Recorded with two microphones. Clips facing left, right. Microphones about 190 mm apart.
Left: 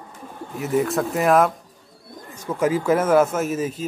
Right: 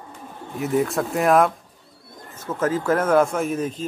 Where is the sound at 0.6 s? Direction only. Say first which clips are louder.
Even; centre (ahead or behind).